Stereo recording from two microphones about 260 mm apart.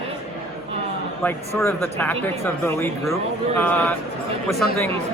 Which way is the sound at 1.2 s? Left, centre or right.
Centre.